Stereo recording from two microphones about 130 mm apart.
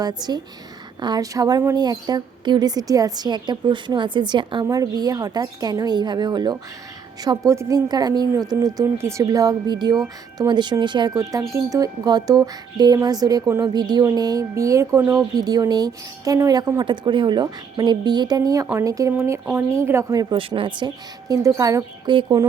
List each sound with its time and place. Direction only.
0.0 s speech: 30° right (ahead or behind)
7.3 s a woman's voice: 25° right (ahead or behind)
20.3 s speech: 40° right (ahead or behind); by 22.1 s 25° right (ahead or behind)
22.1 s speech: 40° right (ahead or behind)